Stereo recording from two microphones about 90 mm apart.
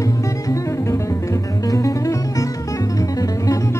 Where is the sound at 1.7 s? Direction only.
40° left (ahead or behind).